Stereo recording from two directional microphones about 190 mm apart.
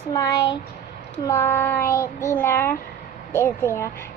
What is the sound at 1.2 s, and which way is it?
Child singing, 15° left (ahead or behind).